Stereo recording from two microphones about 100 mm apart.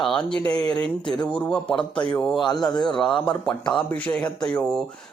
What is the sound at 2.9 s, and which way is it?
Speech, 5° left (ahead or behind).